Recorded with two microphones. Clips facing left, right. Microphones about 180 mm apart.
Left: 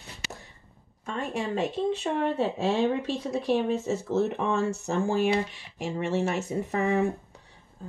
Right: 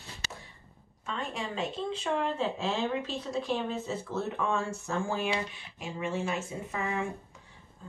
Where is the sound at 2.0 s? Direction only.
30° left (ahead or behind).